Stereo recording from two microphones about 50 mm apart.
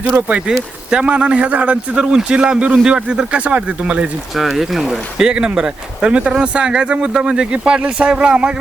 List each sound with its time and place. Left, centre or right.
0.3 s a man's voice: right
4.4 s a man's voice: centre